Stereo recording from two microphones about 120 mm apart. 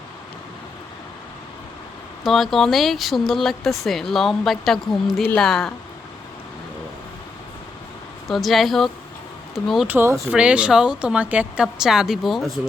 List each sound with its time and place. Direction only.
2.2 s speech: centre (ahead or behind)
8.3 s speech: centre (ahead or behind)
9.8 s a woman's voice: 15° right (ahead or behind); by 12.5 s centre (ahead or behind)